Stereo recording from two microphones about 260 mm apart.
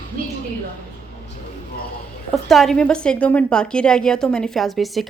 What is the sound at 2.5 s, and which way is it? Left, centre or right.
A woman's voice, centre.